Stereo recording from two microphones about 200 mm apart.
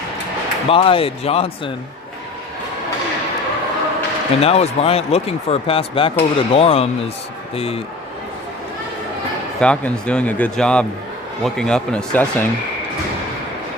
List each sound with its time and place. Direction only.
0.7 s speech: 25° left (ahead or behind)
4.4 s speech: 30° left (ahead or behind)
9.6 s speech: 5° left (ahead or behind)